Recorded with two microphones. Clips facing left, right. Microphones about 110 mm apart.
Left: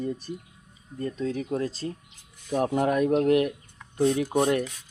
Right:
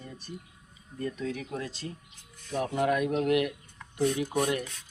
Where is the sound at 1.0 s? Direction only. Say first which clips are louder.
Left 4 dB; 30° left (ahead or behind).